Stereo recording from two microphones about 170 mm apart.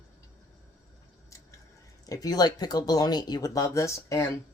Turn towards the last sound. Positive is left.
turn(degrees=15)  # may be behind; listen again after turning